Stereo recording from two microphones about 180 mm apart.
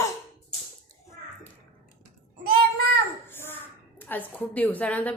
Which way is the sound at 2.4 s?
55° right (ahead or behind).